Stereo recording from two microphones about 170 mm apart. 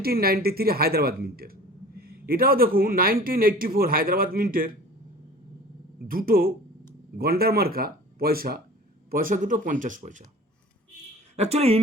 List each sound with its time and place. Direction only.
0.0 s a woman's voice: 65° right (ahead or behind)
6.0 s a woman's voice: 55° right (ahead or behind)
11.3 s a woman's voice: 40° right (ahead or behind)